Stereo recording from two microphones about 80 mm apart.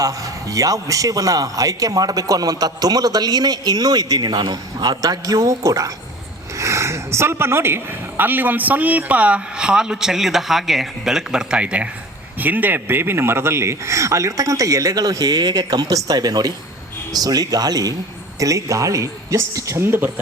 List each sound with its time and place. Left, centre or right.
0.5 s a man's voice: right